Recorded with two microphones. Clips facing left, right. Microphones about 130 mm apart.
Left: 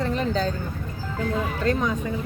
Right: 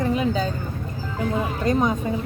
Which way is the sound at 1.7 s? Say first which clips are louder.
Right 3 dB; 20° right (ahead or behind).